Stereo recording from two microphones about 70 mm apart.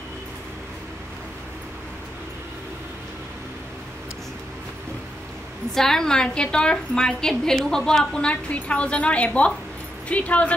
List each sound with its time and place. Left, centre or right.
5.8 s a woman's voice: centre